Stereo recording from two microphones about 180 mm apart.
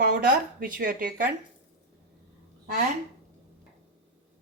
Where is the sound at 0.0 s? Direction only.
50° right (ahead or behind).